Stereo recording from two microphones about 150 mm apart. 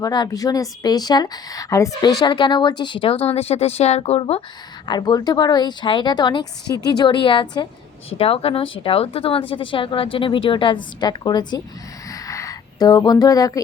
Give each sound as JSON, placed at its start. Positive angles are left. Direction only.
{"t": 0.0, "sound": "speech", "side_deg": 25}
{"t": 4.9, "sound": "speech", "side_deg": 25}
{"t": 12.1, "sound": "a sound", "side_deg": 20}